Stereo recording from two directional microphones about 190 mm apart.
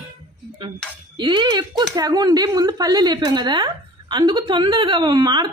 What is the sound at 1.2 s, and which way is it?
Speech, 25° right (ahead or behind).